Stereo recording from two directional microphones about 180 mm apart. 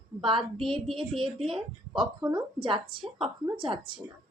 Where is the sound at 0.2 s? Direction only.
30° right (ahead or behind).